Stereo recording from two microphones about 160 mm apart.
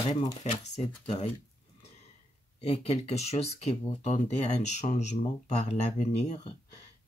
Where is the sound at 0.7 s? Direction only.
45° left (ahead or behind).